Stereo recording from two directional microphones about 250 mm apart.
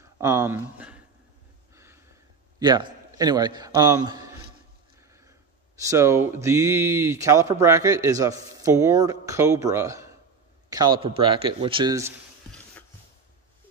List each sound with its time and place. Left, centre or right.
0.0 s speech: centre
1.8 s a sound: centre
2.6 s a man's voice: centre
5.8 s a man's voice: centre